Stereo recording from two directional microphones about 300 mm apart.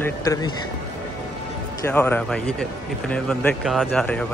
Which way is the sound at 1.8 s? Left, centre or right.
Centre.